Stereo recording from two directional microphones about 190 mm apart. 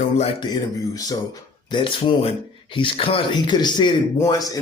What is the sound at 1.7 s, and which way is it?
Speech, 25° left (ahead or behind).